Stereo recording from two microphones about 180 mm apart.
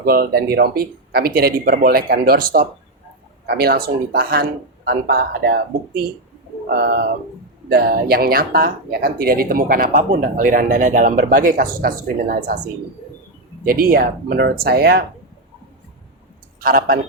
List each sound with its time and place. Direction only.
0.0 s speech: 60° right (ahead or behind)
13.7 s speech: 50° right (ahead or behind)
16.6 s speech: 55° right (ahead or behind)